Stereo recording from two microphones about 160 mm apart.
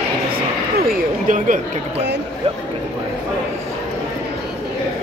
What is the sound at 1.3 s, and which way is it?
Speech, 60° right (ahead or behind).